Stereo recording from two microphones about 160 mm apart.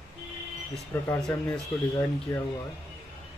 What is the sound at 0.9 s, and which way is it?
Speech, 15° left (ahead or behind).